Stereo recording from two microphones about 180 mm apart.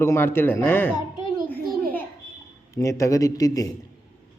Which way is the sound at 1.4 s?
10° left (ahead or behind).